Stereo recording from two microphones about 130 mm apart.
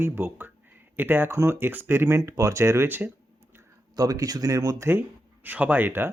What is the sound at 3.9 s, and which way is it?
Speech, 30° right (ahead or behind).